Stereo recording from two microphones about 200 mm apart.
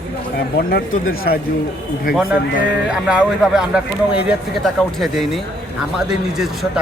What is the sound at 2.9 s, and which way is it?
Speech, 5° right (ahead or behind).